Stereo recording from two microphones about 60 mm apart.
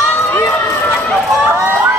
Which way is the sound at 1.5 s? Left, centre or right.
Right.